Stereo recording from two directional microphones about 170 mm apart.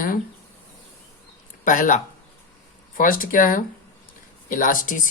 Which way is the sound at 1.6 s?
50° left (ahead or behind).